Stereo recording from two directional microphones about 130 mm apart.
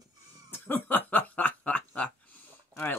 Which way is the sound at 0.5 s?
15° left (ahead or behind).